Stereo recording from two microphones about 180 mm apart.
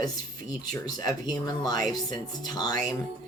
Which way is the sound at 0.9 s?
20° left (ahead or behind).